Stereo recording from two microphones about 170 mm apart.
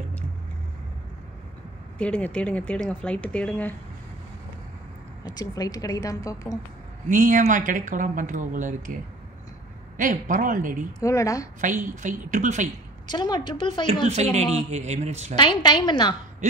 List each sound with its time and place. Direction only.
2.0 s speech: 10° left (ahead or behind)
5.2 s a woman's voice: 20° left (ahead or behind)
7.1 s speech: 50° right (ahead or behind)
9.9 s speech: 50° right (ahead or behind)
11.0 s a woman's voice: 20° left (ahead or behind)
11.6 s speech: 50° right (ahead or behind)
13.0 s a woman's voice: 25° left (ahead or behind)
14.0 s a man's voice: 40° right (ahead or behind)
15.3 s a woman's voice: 30° left (ahead or behind)